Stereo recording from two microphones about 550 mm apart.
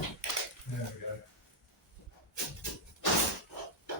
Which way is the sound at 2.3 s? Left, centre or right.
Left.